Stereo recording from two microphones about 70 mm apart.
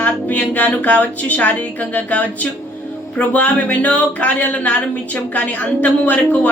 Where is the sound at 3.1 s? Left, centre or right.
Left.